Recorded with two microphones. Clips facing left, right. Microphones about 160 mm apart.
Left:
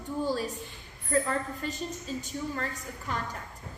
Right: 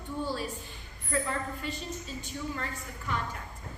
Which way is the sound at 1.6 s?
45° left (ahead or behind).